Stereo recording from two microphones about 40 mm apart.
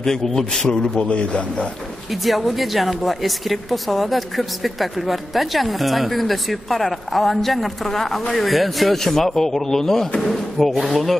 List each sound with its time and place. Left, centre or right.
0.0 s a man's voice: centre
1.0 s a man's voice: left
2.2 s speech: centre